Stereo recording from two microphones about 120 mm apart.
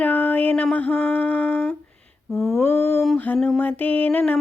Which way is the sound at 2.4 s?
20° left (ahead or behind).